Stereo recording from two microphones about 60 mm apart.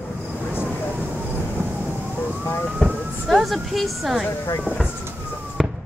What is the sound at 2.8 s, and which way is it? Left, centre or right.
Emergency vehicle, centre.